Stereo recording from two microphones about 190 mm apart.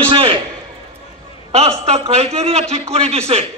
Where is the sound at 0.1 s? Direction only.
25° right (ahead or behind).